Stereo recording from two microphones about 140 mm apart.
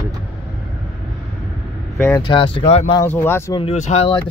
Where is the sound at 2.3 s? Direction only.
40° left (ahead or behind).